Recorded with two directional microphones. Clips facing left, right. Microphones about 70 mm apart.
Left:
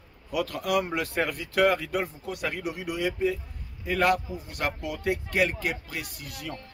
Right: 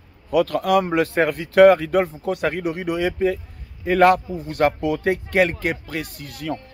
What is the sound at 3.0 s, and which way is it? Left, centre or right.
Speech, right.